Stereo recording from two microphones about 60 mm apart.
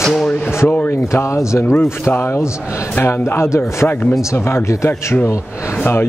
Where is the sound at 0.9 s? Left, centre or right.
Left.